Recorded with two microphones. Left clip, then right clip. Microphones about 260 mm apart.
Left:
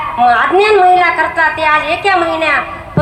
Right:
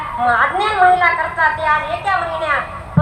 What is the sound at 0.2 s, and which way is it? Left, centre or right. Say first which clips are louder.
A woman's voice: left 6 dB; left.